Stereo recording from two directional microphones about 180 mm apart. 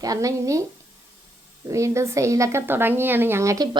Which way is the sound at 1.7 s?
15° right (ahead or behind).